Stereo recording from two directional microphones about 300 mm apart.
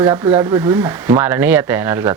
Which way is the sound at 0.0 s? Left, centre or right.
Centre.